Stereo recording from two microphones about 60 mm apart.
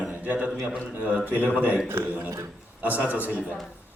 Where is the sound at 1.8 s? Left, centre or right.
Right.